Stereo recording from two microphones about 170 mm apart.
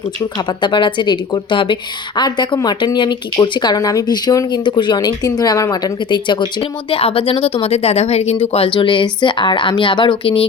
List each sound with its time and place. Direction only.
0.3 s a woman's voice: 30° left (ahead or behind)